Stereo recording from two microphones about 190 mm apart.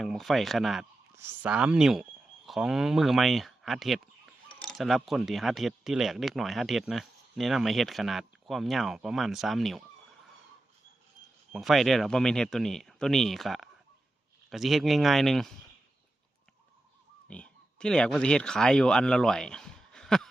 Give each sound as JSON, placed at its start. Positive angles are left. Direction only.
{"t": 0.0, "sound": "speech", "side_deg": 0}
{"t": 1.1, "sound": "speech", "side_deg": -10}
{"t": 11.5, "sound": "speech", "side_deg": 0}
{"t": 17.2, "sound": "speech", "side_deg": 5}